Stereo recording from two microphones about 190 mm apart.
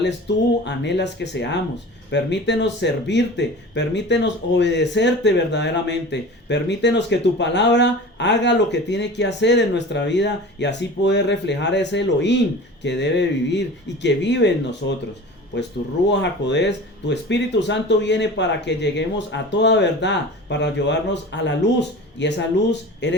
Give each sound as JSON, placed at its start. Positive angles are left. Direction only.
{"t": 0.0, "sound": "speech", "side_deg": 65}
{"t": 16.0, "sound": "speech", "side_deg": 70}